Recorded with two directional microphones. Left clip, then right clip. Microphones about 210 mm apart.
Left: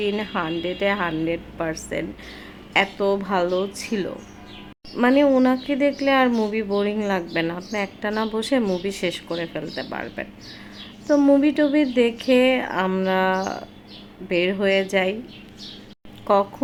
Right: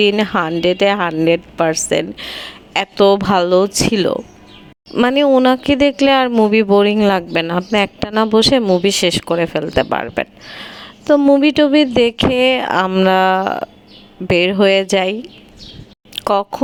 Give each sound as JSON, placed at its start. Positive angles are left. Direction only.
{"t": 0.0, "sound": "speech", "side_deg": -45}
{"t": 16.1, "sound": "speech", "side_deg": -45}